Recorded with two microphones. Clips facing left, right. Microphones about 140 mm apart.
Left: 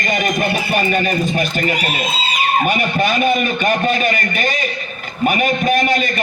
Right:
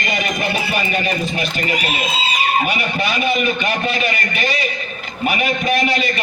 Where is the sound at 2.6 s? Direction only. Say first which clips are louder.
Left 4 dB; 45° left (ahead or behind).